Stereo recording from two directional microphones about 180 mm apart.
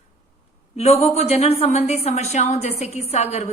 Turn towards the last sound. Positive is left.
turn(degrees=40)  # may be behind; listen again after turning